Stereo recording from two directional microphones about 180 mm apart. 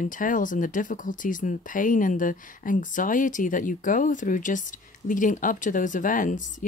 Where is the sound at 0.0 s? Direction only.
45° left (ahead or behind).